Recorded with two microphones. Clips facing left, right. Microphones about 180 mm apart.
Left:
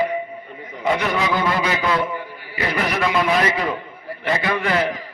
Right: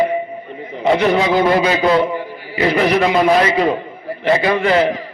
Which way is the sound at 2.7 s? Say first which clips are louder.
Right 6 dB; 30° right (ahead or behind).